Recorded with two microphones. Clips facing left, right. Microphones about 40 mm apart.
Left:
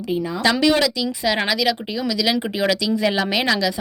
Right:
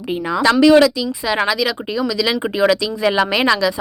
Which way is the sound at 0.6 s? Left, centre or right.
Right.